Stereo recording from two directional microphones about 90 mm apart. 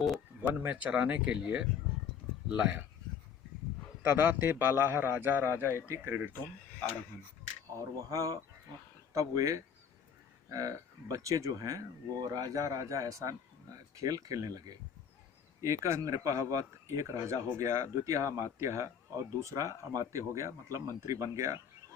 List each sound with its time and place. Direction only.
0.4 s speech: 20° right (ahead or behind)
4.0 s a man's voice: 20° right (ahead or behind)
8.1 s speech: 40° right (ahead or behind)